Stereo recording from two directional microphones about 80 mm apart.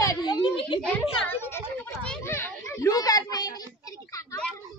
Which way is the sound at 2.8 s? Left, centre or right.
Left.